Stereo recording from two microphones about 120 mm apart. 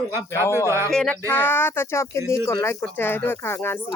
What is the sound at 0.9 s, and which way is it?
Speech, 5° left (ahead or behind).